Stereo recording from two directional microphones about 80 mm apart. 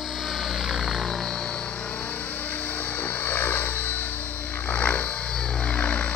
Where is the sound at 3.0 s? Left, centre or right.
Left.